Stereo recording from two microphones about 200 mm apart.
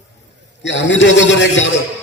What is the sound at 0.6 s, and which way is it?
A man's voice, 65° left (ahead or behind).